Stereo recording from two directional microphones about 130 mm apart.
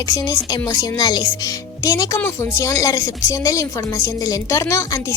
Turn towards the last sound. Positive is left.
turn(degrees=25)  # may be behind; listen again after turning